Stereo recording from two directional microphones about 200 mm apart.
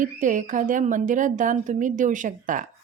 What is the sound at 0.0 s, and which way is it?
Speech, 40° right (ahead or behind).